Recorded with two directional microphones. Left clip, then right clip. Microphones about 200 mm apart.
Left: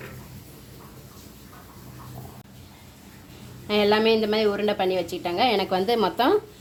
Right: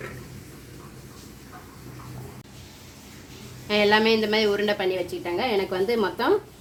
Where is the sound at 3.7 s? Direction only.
50° left (ahead or behind).